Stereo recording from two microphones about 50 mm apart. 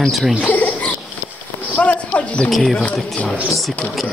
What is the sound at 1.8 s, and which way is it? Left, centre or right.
Speech, left.